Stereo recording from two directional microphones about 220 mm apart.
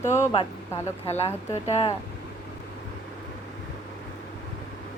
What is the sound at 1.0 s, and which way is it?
Speech, 30° left (ahead or behind).